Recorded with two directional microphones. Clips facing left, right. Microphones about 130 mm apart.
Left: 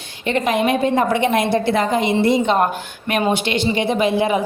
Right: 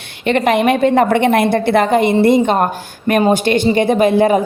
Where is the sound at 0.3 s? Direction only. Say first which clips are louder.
Right 5 dB; 65° right (ahead or behind).